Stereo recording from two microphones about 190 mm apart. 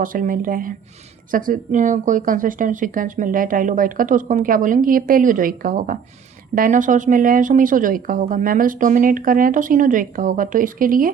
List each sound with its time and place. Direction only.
0.0 s speech: 45° right (ahead or behind)